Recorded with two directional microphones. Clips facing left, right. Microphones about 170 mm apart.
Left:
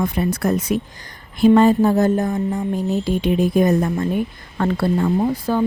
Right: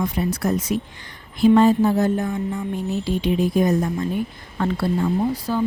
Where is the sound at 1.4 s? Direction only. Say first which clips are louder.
Left 2 dB; 55° left (ahead or behind); by 2.6 s 40° left (ahead or behind).